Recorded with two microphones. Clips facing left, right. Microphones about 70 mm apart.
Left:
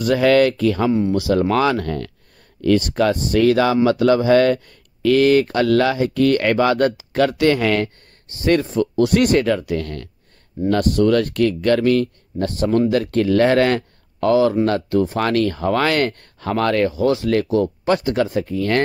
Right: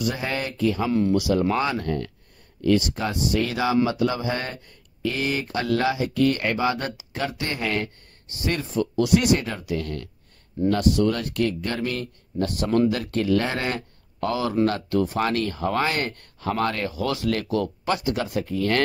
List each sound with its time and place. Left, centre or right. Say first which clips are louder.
0.0 s speech: left 13 dB; left
1.5 s speech: left 6 dB; left
2.6 s speech: left 6 dB; left
7.2 s speech: left 12 dB; left
8.4 s speech: left 8 dB; left
12.4 s speech: left 5 dB; left
12.9 s speech: left 6 dB; left
14.9 s speech: left 5 dB; left
15.1 s speech: left 5 dB; left
16.9 s speech: left 8 dB; left